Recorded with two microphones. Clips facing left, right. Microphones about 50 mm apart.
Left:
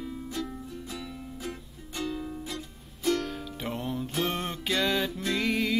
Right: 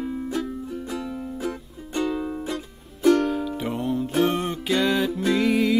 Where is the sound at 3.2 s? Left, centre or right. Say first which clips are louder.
Right 11 dB; centre.